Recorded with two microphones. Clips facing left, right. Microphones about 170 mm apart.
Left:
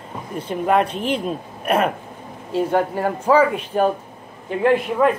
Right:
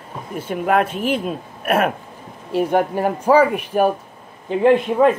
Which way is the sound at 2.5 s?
15° right (ahead or behind).